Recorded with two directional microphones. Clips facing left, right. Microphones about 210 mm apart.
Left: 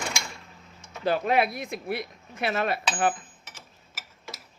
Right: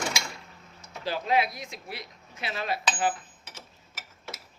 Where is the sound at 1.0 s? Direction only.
55° left (ahead or behind).